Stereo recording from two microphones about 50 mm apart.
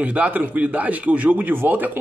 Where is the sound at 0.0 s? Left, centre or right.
Right.